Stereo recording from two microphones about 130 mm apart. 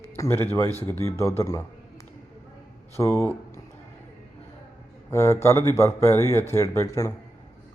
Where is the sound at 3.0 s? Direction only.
20° left (ahead or behind).